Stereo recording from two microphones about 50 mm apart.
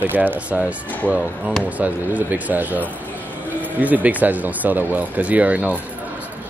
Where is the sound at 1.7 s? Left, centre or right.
Right.